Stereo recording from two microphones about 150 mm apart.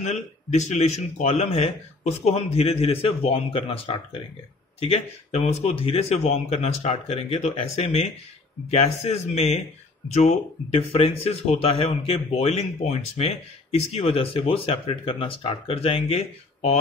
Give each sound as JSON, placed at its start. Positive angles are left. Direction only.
{"t": 0.0, "sound": "speech", "side_deg": 50}